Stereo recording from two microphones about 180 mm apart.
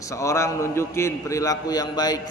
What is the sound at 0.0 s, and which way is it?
A man's voice, 15° left (ahead or behind).